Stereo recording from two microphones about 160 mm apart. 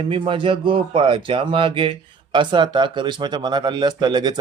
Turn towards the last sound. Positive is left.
turn(degrees=-25)  # may be behind; listen again after turning